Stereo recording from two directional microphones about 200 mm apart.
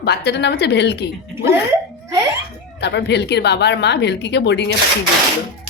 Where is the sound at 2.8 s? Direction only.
60° left (ahead or behind).